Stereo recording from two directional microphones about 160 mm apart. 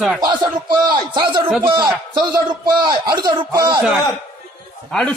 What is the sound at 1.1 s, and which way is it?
Speech, 30° right (ahead or behind).